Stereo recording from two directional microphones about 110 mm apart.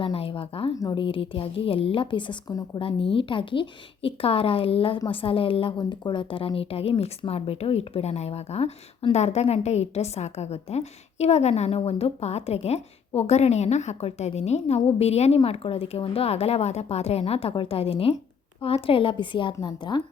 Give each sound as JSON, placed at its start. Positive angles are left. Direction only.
{"t": 0.0, "sound": "a woman's voice", "side_deg": 55}
{"t": 5.7, "sound": "speech", "side_deg": 40}
{"t": 6.8, "sound": "a woman's voice", "side_deg": 50}
{"t": 15.4, "sound": "speech", "side_deg": 60}
{"t": 17.5, "sound": "a woman's voice", "side_deg": 50}